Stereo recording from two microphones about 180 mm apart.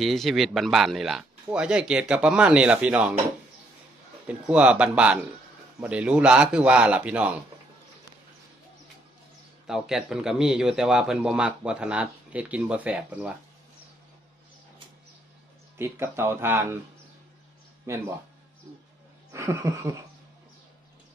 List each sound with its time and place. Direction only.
0.0 s speech: centre (ahead or behind)
4.3 s speech: 5° right (ahead or behind)
9.7 s speech: 5° right (ahead or behind)
15.8 s speech: 15° right (ahead or behind)
17.9 s speech: 15° right (ahead or behind)
19.3 s speech: 15° right (ahead or behind)